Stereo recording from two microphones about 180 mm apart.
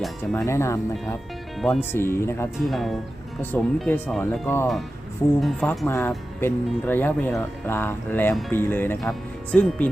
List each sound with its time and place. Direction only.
0.3 s speech: 15° left (ahead or behind)
2.6 s speech: centre (ahead or behind)
5.4 s speech: centre (ahead or behind)
5.9 s speech: 15° left (ahead or behind)